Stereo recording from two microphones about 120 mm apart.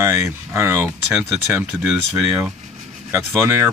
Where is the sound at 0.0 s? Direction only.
20° right (ahead or behind).